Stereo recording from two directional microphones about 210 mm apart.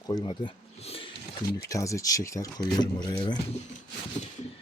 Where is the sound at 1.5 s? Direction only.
15° left (ahead or behind).